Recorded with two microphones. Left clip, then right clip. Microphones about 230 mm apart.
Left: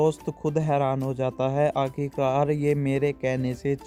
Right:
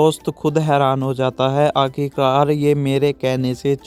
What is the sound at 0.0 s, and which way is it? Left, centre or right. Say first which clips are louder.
Speech: right 8 dB; right.